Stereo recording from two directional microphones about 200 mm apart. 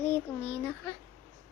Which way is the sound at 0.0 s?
10° left (ahead or behind).